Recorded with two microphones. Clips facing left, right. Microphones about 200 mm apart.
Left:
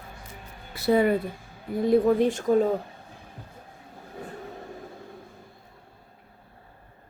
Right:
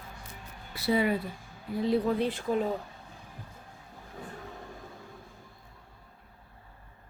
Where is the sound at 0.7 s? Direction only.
50° left (ahead or behind).